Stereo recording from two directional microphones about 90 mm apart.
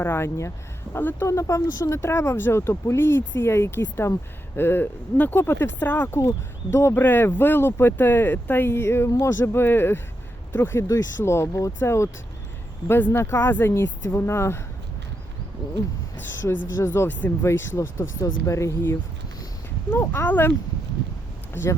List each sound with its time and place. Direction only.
0.0 s speech: 25° left (ahead or behind)
1.3 s speech: 35° left (ahead or behind); by 6.1 s 20° left (ahead or behind)
6.1 s speech: 35° left (ahead or behind)
16.5 s speech: 30° left (ahead or behind)
20.2 s speech: 20° left (ahead or behind)
21.5 s speech: 30° left (ahead or behind)